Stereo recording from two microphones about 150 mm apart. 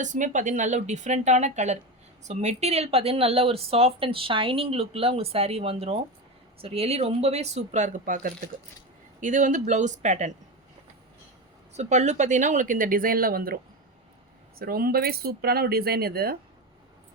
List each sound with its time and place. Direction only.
0.0 s speech: 55° right (ahead or behind)
11.7 s speech: 50° right (ahead or behind); by 13.6 s 75° right (ahead or behind)
14.6 s speech: 80° right